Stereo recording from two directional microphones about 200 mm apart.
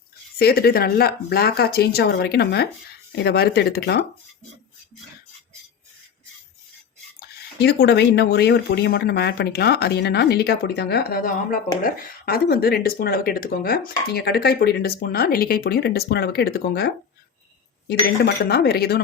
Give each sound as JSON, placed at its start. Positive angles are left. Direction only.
{"t": 0.3, "sound": "speech", "side_deg": 50}
{"t": 7.2, "sound": "speech", "side_deg": 55}